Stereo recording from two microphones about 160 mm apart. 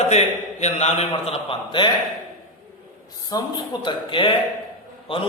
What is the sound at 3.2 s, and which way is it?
A man's voice, 25° left (ahead or behind).